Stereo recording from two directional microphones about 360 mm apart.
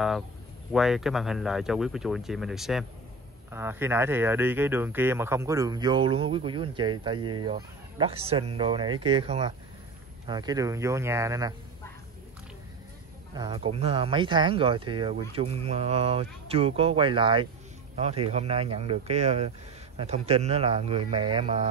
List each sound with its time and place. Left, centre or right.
0.7 s speech: centre
13.3 s speech: centre